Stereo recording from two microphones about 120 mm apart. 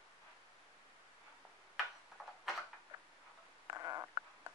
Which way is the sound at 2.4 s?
Centre (ahead or behind).